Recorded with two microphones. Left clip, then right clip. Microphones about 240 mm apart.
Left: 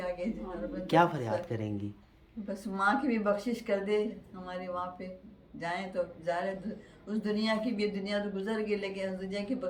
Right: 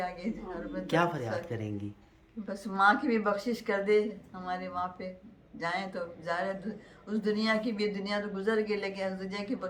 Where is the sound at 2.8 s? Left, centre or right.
Centre.